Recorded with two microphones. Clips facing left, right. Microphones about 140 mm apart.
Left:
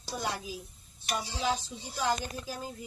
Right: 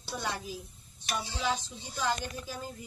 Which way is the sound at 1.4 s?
35° left (ahead or behind).